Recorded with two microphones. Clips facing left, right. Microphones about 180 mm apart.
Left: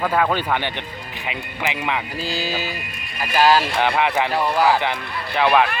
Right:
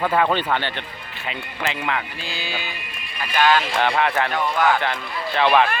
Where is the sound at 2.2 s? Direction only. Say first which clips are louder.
Left 6 dB; 40° left (ahead or behind).